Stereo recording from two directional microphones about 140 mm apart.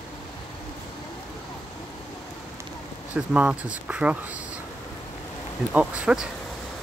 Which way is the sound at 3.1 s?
10° right (ahead or behind).